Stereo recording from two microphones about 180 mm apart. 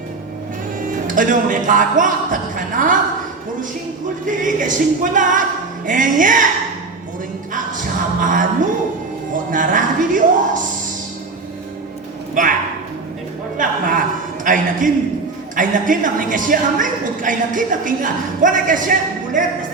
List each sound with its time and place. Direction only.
0.8 s speech: 45° right (ahead or behind)
4.3 s a woman's voice: 45° right (ahead or behind)
5.1 s music: 45° right (ahead or behind)
7.5 s music: 45° right (ahead or behind)
9.3 s a woman's voice: 45° right (ahead or behind)
12.3 s speech: 50° right (ahead or behind)
13.6 s a woman's voice: 50° right (ahead or behind)